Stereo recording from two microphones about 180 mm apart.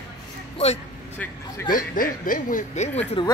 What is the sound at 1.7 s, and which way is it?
Speech, 50° left (ahead or behind).